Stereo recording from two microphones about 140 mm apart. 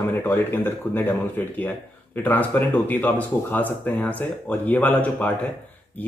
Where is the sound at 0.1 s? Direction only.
15° left (ahead or behind).